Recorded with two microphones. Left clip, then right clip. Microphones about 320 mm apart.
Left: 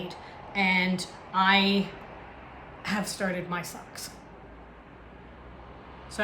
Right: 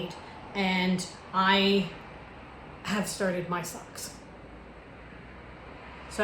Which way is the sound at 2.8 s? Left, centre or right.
Centre.